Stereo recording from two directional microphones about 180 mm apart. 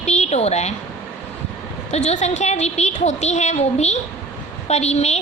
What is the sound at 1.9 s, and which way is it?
A woman's voice, 40° left (ahead or behind).